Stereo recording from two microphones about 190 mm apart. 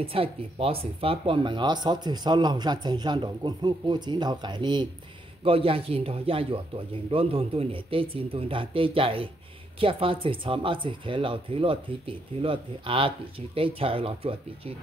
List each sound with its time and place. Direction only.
0.0 s speech: 30° right (ahead or behind)